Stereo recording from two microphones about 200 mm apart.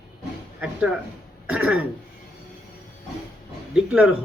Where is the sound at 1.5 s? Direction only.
5° right (ahead or behind).